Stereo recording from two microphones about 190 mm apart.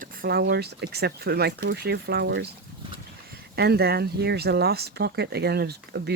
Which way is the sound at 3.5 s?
55° right (ahead or behind).